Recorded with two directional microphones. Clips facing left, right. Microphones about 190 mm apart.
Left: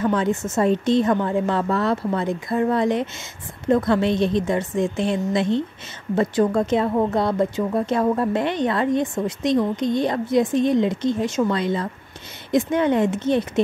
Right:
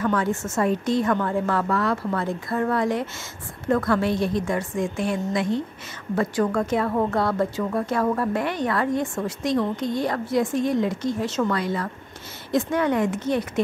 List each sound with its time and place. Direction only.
0.0 s speech: 20° left (ahead or behind)